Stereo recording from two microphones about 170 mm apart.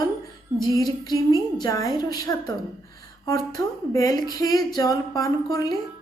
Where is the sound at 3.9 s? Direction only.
20° left (ahead or behind).